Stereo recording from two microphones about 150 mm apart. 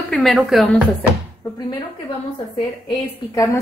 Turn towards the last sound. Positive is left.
turn(degrees=20)  # may be behind; listen again after turning